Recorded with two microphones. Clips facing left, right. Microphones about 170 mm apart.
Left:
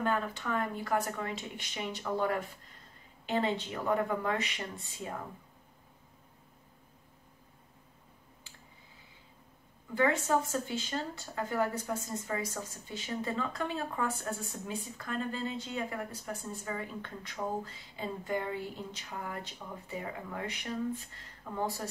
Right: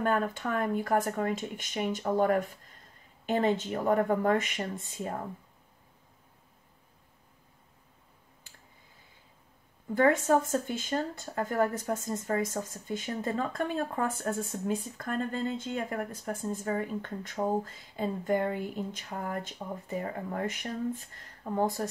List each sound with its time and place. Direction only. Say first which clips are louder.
0.0 s speech: right 4 dB; 50° right (ahead or behind)
9.9 s speech: right 5 dB; 50° right (ahead or behind)